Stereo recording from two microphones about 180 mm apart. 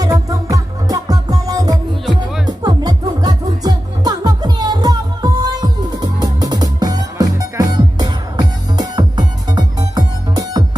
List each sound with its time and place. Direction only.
0.0 s music: 20° right (ahead or behind)